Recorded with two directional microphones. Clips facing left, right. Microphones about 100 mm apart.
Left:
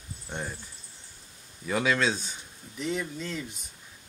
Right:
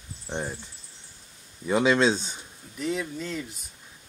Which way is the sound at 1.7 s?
25° right (ahead or behind).